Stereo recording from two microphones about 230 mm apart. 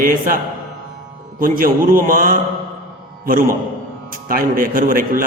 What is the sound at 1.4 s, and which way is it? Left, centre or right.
A man's voice, right.